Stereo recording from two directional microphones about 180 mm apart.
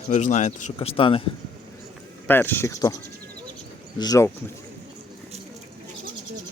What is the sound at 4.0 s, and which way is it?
Speech, 20° left (ahead or behind).